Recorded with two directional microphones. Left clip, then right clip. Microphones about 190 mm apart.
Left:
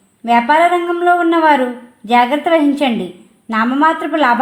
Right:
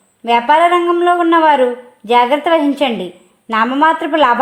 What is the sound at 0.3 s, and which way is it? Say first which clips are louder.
A woman's voice: right 1 dB; 35° right (ahead or behind).